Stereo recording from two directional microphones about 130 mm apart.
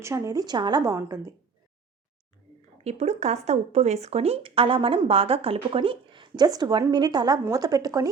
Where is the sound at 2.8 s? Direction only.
55° right (ahead or behind).